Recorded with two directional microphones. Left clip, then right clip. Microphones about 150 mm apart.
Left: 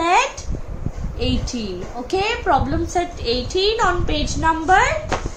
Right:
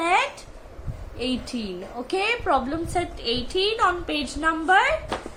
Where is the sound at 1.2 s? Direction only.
30° right (ahead or behind).